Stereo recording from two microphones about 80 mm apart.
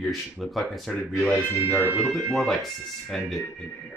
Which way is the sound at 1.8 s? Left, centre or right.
Right.